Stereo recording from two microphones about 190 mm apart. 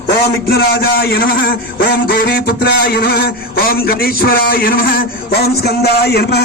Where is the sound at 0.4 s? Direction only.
55° left (ahead or behind).